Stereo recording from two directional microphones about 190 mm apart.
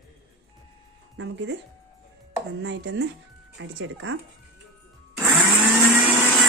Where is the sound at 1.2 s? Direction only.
70° right (ahead or behind).